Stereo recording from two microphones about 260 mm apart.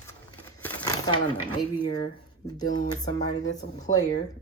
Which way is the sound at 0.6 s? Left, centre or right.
Centre.